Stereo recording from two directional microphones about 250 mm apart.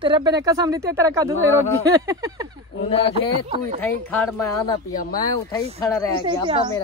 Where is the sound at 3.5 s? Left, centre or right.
Right.